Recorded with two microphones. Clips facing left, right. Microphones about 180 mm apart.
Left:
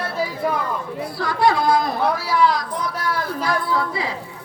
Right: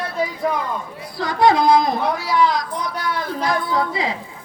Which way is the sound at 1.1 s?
20° right (ahead or behind).